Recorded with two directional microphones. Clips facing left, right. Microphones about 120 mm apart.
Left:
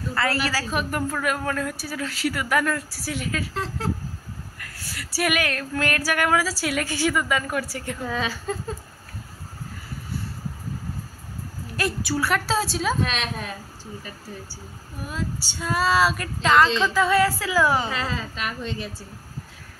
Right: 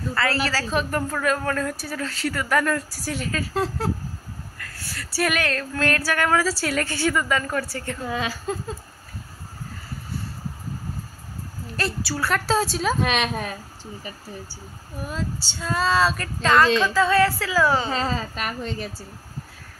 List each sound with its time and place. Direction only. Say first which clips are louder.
0.1 s speech: even; 15° left (ahead or behind)
4.6 s speech: right 1 dB; 15° left (ahead or behind)
8.0 s a woman's voice: even; 10° right (ahead or behind)
11.7 s speech: left 2 dB; 15° left (ahead or behind)
12.3 s a woman's voice: right 4 dB; centre (ahead or behind)
13.0 s a woman's voice: right 4 dB; 60° right (ahead or behind)
15.0 s speech: even; 10° left (ahead or behind)
17.8 s a woman's voice: right 3 dB; 35° right (ahead or behind)